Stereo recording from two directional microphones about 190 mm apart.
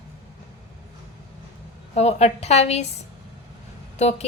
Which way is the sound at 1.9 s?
35° left (ahead or behind).